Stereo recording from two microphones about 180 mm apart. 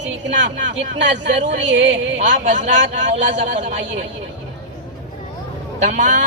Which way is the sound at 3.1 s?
45° right (ahead or behind).